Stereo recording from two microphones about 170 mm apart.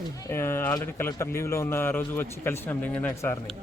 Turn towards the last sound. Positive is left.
turn(degrees=10)  # may be behind; listen again after turning